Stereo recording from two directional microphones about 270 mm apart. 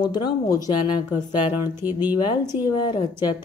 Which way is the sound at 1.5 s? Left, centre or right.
Centre.